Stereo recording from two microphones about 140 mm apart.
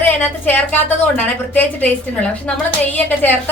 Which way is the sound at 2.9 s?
15° left (ahead or behind).